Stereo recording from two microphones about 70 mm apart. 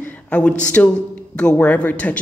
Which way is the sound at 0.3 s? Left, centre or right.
Centre.